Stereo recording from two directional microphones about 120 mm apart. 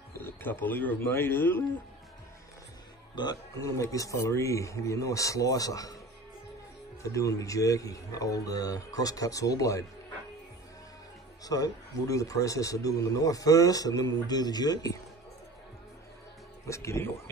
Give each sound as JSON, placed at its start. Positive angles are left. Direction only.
{"t": 0.2, "sound": "speech", "side_deg": 15}
{"t": 3.2, "sound": "a man's voice", "side_deg": 35}
{"t": 7.0, "sound": "a man's voice", "side_deg": 25}
{"t": 11.4, "sound": "a man's voice", "side_deg": 30}
{"t": 16.6, "sound": "a man's voice", "side_deg": 25}